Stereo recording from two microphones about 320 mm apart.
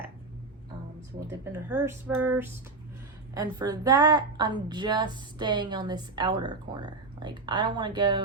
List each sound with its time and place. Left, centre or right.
1.5 s a woman's voice: centre